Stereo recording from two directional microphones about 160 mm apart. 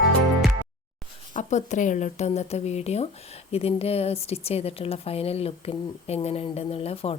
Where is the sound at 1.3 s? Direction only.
50° left (ahead or behind).